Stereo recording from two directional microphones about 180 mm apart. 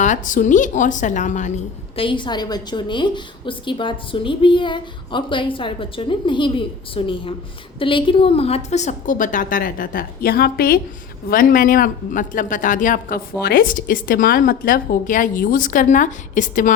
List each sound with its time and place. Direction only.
0.0 s speech: 45° left (ahead or behind)
2.0 s a woman's voice: 25° left (ahead or behind); by 16.7 s 45° left (ahead or behind)